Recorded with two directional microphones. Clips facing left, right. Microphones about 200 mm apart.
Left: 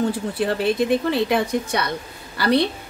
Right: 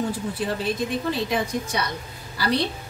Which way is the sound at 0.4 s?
65° left (ahead or behind).